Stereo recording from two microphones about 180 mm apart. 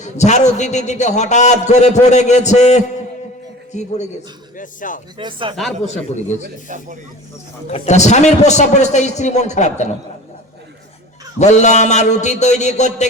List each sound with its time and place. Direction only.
0.0 s a man's voice: 40° left (ahead or behind)
5.1 s speech: 25° right (ahead or behind)
5.8 s a man's voice: 40° left (ahead or behind)
6.7 s speech: 45° right (ahead or behind)
7.7 s a man's voice: 40° left (ahead or behind)
11.3 s a man's voice: 40° left (ahead or behind)